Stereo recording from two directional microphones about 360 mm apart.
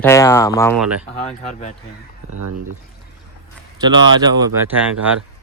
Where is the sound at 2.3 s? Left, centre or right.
Right.